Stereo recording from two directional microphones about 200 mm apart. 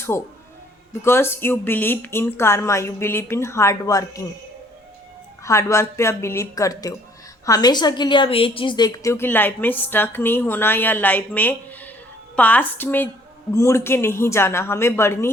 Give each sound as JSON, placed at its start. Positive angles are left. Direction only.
{"t": 0.1, "sound": "a woman's voice", "side_deg": 10}
{"t": 5.4, "sound": "a woman's voice", "side_deg": 15}